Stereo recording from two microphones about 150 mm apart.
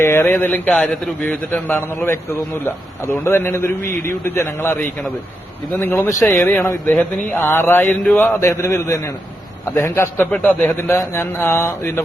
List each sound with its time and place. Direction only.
0.0 s speech: 15° left (ahead or behind)